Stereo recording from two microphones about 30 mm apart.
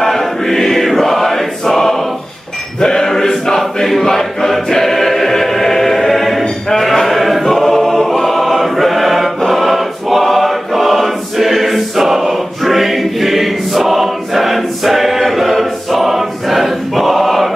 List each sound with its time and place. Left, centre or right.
0.0 s choir: centre
2.8 s a sound: left
3.5 s choir: centre